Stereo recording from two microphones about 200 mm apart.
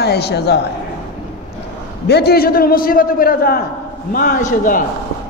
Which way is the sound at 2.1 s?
55° left (ahead or behind).